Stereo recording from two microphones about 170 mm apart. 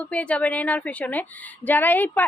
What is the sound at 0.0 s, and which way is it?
A woman's voice, 10° left (ahead or behind).